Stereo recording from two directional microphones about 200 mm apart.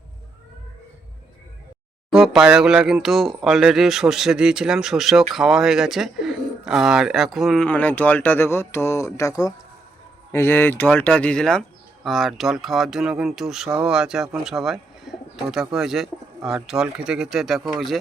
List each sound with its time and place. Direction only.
2.0 s speech: centre (ahead or behind)